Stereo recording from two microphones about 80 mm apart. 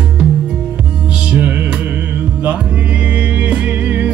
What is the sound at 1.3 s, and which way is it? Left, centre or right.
Music, centre.